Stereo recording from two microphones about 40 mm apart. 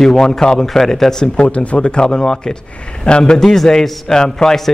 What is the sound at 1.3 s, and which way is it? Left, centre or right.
Speech, left.